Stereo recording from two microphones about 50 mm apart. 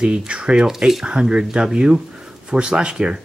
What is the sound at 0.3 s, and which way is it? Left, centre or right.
Speech, centre.